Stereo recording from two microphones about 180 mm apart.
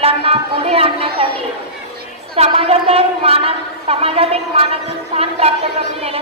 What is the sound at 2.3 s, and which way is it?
A woman's voice, 35° right (ahead or behind).